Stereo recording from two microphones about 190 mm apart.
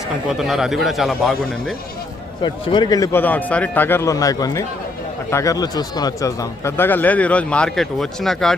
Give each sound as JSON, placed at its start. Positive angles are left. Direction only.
{"t": 0.3, "sound": "a man's voice", "side_deg": 0}
{"t": 2.4, "sound": "speech", "side_deg": 25}